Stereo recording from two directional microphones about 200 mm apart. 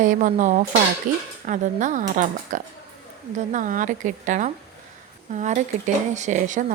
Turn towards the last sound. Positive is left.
turn(degrees=-40)  # may be behind; listen again after turning